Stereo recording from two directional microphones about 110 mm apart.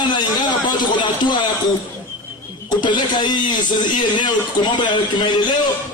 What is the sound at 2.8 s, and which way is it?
A man's voice, 45° left (ahead or behind).